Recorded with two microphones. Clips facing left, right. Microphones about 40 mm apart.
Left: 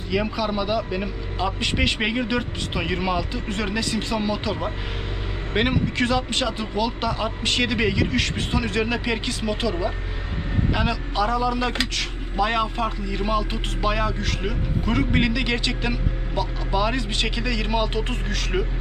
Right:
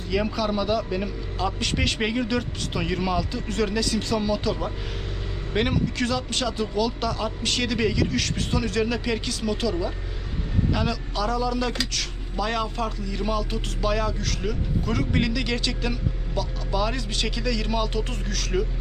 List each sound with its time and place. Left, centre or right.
0.1 s speech: centre
11.7 s speech: left